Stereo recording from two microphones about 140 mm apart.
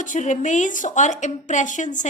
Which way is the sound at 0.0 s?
65° left (ahead or behind).